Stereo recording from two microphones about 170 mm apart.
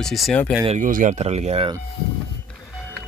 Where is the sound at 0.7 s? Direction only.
50° right (ahead or behind).